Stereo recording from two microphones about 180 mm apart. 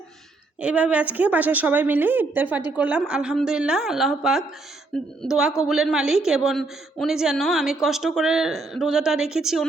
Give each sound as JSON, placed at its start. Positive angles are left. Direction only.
{"t": 0.6, "sound": "a woman's voice", "side_deg": -5}